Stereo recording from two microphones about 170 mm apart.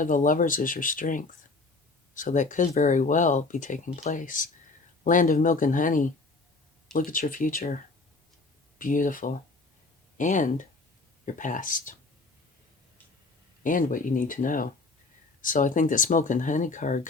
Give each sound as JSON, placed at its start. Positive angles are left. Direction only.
{"t": 0.0, "sound": "speech", "side_deg": 50}
{"t": 8.8, "sound": "speech", "side_deg": 55}
{"t": 13.7, "sound": "speech", "side_deg": 55}